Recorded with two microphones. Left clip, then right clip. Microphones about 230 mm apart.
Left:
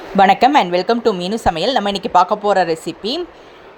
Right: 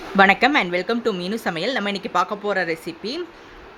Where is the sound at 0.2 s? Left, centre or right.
Centre.